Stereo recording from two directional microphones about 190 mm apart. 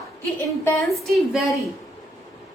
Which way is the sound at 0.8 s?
Centre (ahead or behind).